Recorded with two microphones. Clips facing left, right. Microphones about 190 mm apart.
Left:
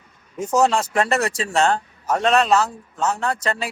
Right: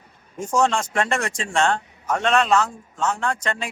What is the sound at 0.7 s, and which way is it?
Speech, 35° left (ahead or behind).